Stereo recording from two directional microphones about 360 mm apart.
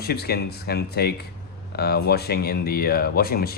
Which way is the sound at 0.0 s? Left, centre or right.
Left.